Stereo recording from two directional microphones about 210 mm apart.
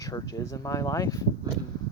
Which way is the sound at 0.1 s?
15° left (ahead or behind).